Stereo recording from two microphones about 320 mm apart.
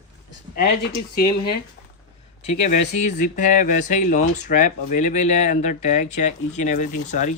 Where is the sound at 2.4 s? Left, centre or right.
Left.